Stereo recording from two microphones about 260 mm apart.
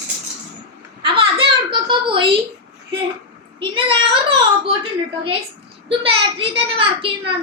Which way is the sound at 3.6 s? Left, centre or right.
Centre.